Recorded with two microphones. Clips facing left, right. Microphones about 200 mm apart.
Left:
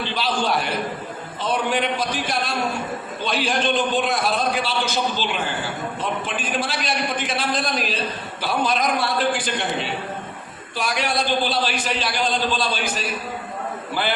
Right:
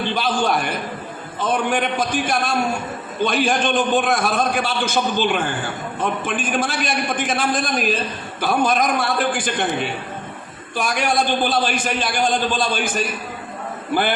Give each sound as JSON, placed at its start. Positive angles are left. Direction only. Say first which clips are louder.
{"t": 0.0, "sound": "a man's voice", "louder": "right 3 dB", "side_deg": -50}